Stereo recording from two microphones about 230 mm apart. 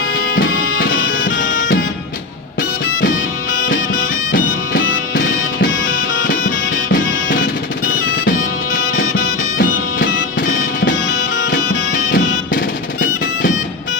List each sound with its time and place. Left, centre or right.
0.3 s music: left
1.2 s music: left
4.7 s music: left
10.8 s music: left
12.5 s music: left